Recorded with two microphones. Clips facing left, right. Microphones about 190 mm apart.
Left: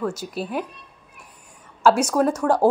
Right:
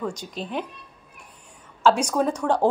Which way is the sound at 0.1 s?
5° left (ahead or behind).